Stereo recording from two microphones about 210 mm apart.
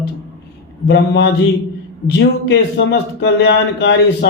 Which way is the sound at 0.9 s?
55° left (ahead or behind).